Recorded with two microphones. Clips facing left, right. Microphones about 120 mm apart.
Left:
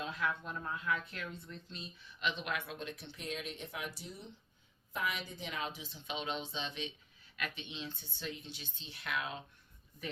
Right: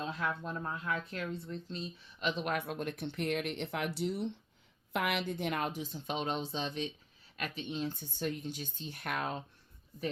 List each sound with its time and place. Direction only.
0.0 s a woman's voice: 35° right (ahead or behind)